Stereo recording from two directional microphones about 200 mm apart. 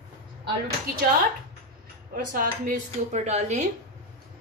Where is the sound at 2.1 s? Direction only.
45° right (ahead or behind).